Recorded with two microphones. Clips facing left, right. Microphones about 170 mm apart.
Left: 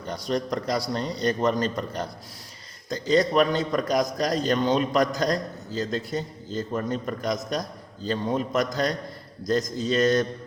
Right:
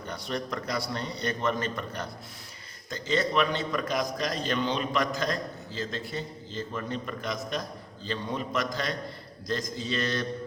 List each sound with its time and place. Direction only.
0.2 s a man's voice: 35° left (ahead or behind)